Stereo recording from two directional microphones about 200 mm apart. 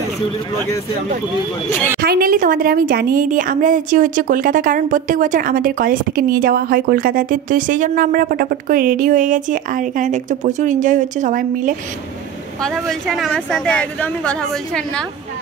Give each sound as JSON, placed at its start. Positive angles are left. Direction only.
{"t": 1.7, "sound": "a woman's voice", "side_deg": 10}
{"t": 2.0, "sound": "a woman's voice", "side_deg": -50}
{"t": 12.6, "sound": "a woman's voice", "side_deg": 0}